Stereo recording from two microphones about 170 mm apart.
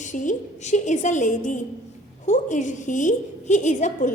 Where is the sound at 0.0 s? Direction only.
45° left (ahead or behind).